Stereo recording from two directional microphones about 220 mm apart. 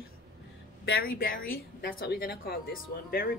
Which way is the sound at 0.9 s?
40° left (ahead or behind).